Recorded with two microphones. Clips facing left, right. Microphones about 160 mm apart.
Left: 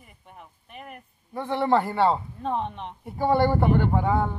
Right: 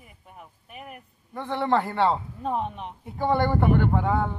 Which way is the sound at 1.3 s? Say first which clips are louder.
Left 2 dB; 10° left (ahead or behind).